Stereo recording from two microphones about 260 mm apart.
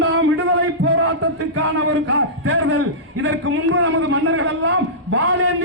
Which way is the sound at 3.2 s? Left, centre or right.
Right.